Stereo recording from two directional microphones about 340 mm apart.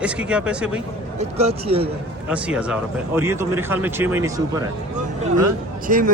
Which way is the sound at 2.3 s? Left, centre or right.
Centre.